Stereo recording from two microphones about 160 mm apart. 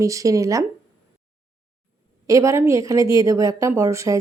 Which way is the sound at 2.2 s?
20° right (ahead or behind).